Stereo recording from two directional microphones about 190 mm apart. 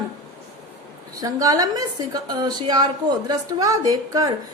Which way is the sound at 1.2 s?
20° right (ahead or behind).